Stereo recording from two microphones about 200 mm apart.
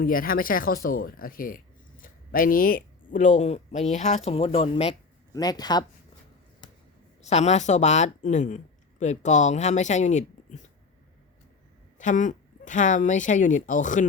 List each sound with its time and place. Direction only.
0.0 s speech: 45° left (ahead or behind); by 5.8 s 20° left (ahead or behind)
7.2 s speech: 35° left (ahead or behind)
11.9 s speech: 40° left (ahead or behind)